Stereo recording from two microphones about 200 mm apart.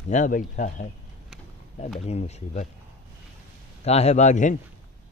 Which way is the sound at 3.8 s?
30° left (ahead or behind).